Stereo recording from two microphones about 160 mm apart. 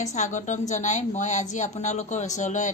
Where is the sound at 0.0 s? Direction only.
50° left (ahead or behind).